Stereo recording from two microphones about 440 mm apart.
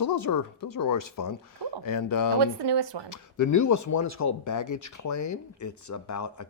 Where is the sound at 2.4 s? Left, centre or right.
Right.